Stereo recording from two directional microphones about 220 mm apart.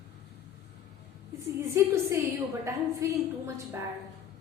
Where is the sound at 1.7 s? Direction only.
15° right (ahead or behind).